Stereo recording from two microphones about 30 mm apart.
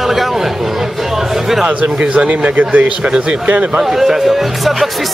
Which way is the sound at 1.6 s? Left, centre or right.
Right.